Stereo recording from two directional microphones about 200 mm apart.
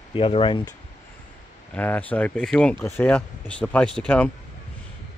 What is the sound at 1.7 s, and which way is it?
Speech, 10° left (ahead or behind).